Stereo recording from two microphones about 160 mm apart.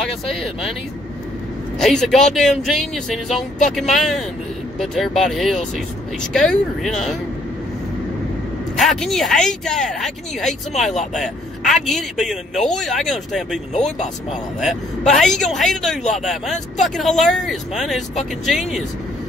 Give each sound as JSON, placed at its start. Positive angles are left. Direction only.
{"t": 0.0, "sound": "speech", "side_deg": 0}
{"t": 1.8, "sound": "speech", "side_deg": 0}
{"t": 8.7, "sound": "speech", "side_deg": 0}
{"t": 13.7, "sound": "speech", "side_deg": 45}
{"t": 14.6, "sound": "speech", "side_deg": 0}